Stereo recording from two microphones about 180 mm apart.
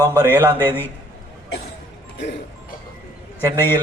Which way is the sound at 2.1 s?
75° left (ahead or behind).